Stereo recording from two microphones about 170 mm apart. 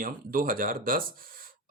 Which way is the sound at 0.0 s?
60° right (ahead or behind).